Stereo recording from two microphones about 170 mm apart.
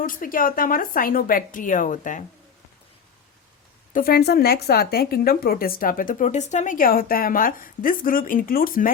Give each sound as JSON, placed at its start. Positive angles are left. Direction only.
{"t": 0.0, "sound": "speech", "side_deg": 55}
{"t": 3.9, "sound": "a woman's voice", "side_deg": 60}